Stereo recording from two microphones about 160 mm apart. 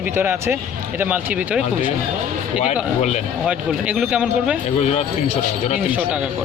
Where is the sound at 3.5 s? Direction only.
5° right (ahead or behind).